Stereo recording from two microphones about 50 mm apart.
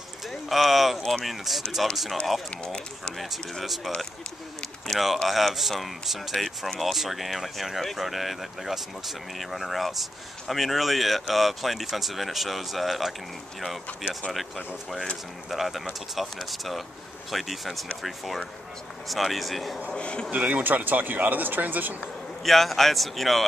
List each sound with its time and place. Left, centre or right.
0.3 s speech: centre
2.5 s speech: centre
3.2 s speech: centre
15.5 s speech: centre
19.9 s speech: left
20.2 s speech: right
22.4 s speech: centre